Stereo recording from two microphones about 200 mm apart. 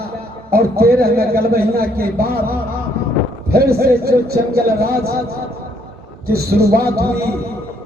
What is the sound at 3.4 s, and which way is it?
A man's voice, 50° right (ahead or behind).